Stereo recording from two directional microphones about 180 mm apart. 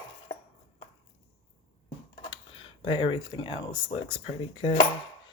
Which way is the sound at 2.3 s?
30° left (ahead or behind).